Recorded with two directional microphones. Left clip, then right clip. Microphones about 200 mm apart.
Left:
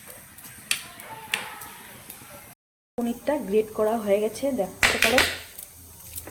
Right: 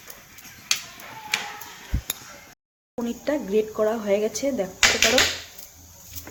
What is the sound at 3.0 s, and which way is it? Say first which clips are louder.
Speech: even; centre (ahead or behind).